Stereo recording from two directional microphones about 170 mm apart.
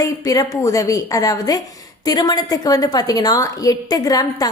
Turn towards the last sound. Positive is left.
turn(degrees=20)  # may be behind; listen again after turning